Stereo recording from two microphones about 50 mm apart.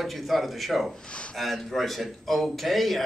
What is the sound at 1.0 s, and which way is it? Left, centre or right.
Speech, left.